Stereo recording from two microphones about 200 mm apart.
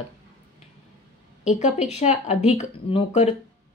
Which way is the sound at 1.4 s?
35° left (ahead or behind).